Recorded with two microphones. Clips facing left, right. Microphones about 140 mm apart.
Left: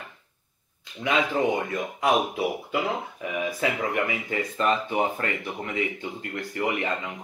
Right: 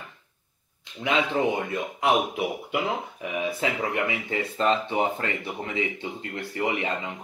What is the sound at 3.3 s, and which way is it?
Speech, 25° right (ahead or behind).